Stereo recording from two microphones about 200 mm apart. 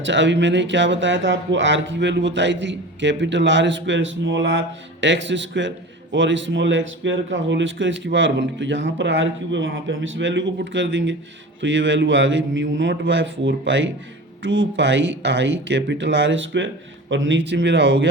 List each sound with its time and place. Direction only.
0.0 s speech: 65° right (ahead or behind)